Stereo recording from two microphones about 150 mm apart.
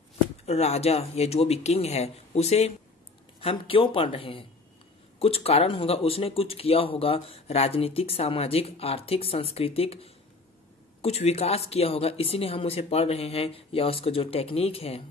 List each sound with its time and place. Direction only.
0.5 s speech: 45° left (ahead or behind)